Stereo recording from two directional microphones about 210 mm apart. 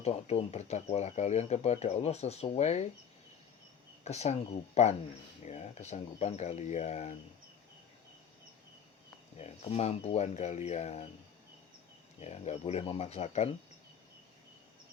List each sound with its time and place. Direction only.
0.0 s speech: 30° left (ahead or behind)
4.0 s speech: 30° left (ahead or behind)
9.4 s speech: 30° left (ahead or behind)
12.2 s speech: 30° left (ahead or behind)